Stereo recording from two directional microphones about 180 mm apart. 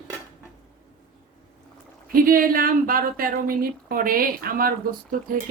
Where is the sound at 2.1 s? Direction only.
50° right (ahead or behind).